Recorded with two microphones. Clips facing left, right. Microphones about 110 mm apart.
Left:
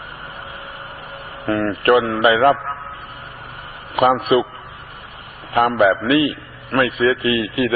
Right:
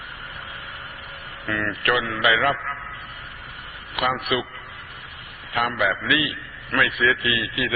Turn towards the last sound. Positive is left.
turn(degrees=35)  # may be behind; listen again after turning